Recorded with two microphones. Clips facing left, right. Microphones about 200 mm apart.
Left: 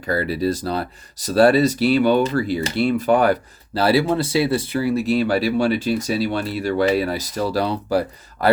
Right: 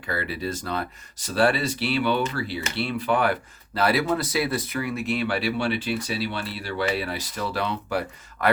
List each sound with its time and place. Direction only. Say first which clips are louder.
0.1 s speech: left 8 dB; 40° left (ahead or behind)
3.8 s speech: left 5 dB; 30° left (ahead or behind)